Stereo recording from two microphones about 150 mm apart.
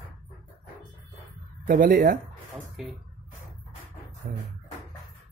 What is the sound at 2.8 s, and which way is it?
Speech, centre (ahead or behind).